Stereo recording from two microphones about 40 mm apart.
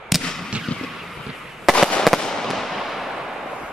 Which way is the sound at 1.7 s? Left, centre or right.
Centre.